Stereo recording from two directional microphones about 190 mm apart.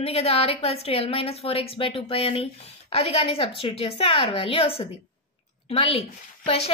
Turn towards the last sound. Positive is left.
turn(degrees=30)  # may be behind; listen again after turning